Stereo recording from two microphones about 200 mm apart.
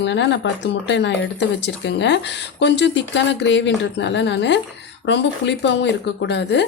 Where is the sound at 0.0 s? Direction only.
60° left (ahead or behind).